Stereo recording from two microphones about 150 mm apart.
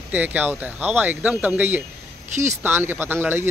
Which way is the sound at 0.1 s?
10° right (ahead or behind).